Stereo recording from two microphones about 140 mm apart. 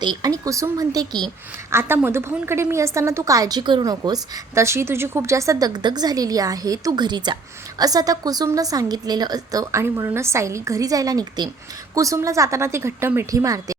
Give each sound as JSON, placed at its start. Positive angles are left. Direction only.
{"t": 0.0, "sound": "a woman's voice", "side_deg": -30}
{"t": 1.7, "sound": "a woman's voice", "side_deg": -15}